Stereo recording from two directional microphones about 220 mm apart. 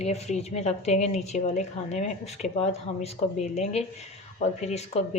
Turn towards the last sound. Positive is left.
turn(degrees=30)  # may be behind; listen again after turning